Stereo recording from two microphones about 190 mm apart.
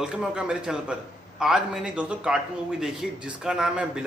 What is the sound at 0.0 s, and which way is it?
A man's voice, 5° right (ahead or behind).